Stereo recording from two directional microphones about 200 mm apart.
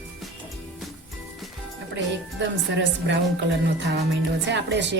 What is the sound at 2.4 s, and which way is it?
Speech, 60° right (ahead or behind).